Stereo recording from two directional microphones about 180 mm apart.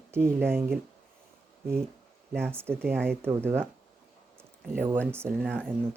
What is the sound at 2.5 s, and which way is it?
Speech, 15° right (ahead or behind).